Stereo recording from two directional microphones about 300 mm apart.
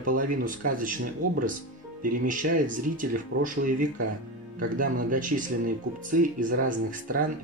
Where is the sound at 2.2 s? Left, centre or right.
Right.